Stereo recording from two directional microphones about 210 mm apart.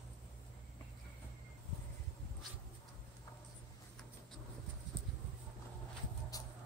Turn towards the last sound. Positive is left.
turn(degrees=15)  # may be behind; listen again after turning